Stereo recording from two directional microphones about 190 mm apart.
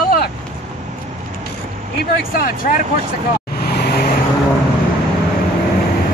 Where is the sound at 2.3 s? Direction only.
50° left (ahead or behind).